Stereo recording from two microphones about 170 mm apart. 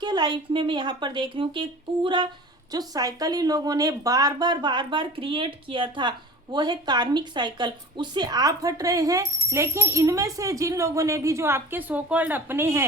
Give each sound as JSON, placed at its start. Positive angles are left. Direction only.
{"t": 0.0, "sound": "speech", "side_deg": -25}